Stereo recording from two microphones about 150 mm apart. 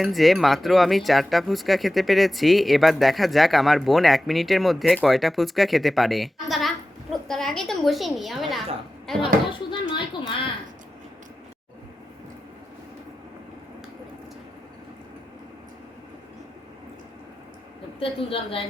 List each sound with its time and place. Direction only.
0.0 s a woman's voice: centre (ahead or behind)
9.6 s speech: 30° left (ahead or behind)
18.0 s speech: 35° left (ahead or behind)